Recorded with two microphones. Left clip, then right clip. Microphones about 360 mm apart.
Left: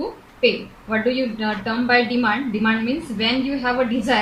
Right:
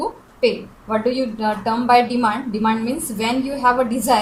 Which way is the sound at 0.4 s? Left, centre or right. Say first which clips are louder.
Even; right.